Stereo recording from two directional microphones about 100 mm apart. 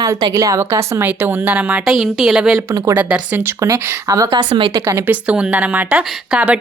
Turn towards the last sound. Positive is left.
turn(degrees=-10)  # may be behind; listen again after turning